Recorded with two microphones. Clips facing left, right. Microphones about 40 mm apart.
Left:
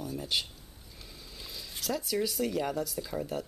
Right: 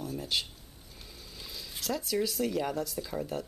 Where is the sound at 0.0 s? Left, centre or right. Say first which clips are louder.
Even; centre.